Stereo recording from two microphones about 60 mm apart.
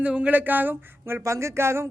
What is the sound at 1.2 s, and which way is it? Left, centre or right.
Speech, right.